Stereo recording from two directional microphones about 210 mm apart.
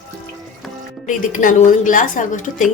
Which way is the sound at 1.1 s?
40° left (ahead or behind).